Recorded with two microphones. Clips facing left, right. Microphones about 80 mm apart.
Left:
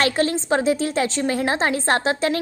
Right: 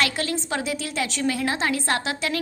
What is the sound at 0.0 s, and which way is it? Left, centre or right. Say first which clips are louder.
A woman's voice: left 5 dB; left.